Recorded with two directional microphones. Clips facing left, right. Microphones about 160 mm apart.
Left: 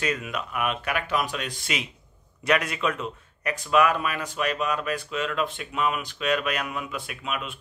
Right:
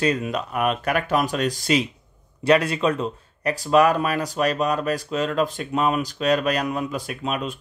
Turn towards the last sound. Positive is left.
turn(degrees=-35)  # may be behind; listen again after turning